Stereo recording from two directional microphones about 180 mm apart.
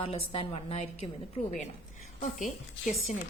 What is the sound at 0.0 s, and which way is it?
A woman's voice, 30° left (ahead or behind).